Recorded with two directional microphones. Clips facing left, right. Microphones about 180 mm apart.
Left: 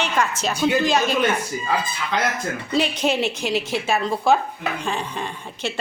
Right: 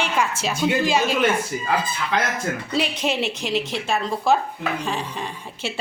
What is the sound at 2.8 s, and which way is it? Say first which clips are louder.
A woman's voice: left 3 dB; centre (ahead or behind).